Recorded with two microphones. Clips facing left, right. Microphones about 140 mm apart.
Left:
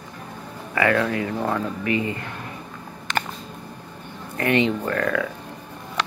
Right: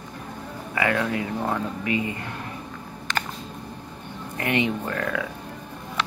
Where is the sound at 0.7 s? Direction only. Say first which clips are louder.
Left 3 dB; 15° right (ahead or behind).